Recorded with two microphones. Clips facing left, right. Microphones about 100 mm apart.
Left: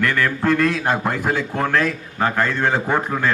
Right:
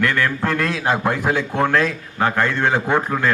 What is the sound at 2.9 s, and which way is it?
Speech, centre (ahead or behind).